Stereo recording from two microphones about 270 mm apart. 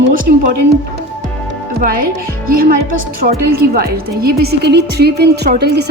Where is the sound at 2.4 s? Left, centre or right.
Right.